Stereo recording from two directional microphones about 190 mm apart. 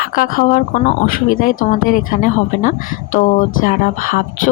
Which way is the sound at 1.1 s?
45° left (ahead or behind).